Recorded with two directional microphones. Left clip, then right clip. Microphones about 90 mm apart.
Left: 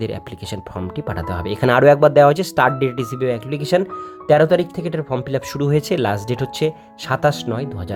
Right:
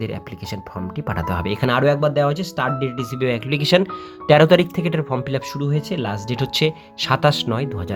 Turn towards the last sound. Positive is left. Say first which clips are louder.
# right 1 dB
turn(degrees=15)  # may be behind; listen again after turning